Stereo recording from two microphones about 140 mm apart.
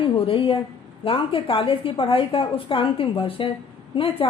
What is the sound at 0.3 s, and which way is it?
A woman's voice, 40° left (ahead or behind).